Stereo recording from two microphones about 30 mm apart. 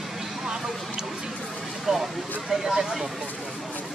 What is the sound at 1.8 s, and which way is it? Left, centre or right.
Vehicle, centre.